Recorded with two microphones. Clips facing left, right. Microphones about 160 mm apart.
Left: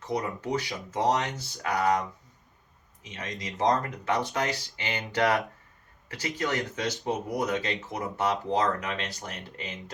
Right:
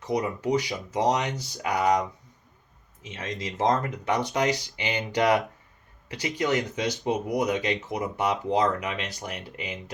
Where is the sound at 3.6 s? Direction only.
20° right (ahead or behind).